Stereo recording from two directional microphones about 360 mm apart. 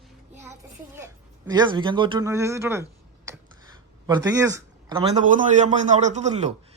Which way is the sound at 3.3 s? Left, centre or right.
Centre.